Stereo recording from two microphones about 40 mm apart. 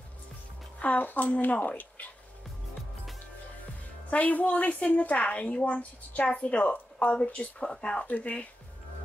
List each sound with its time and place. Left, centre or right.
0.7 s speech: left
1.0 s speech: left
4.1 s a woman's voice: left
7.2 s speech: left
8.1 s a woman's voice: left